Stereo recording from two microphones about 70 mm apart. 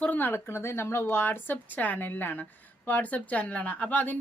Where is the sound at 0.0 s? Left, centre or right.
Left.